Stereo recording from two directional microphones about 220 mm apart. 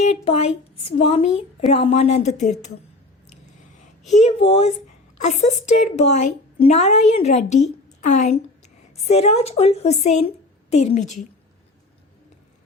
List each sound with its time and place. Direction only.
0.0 s a woman's voice: 30° left (ahead or behind)
4.1 s a woman's voice: 30° left (ahead or behind)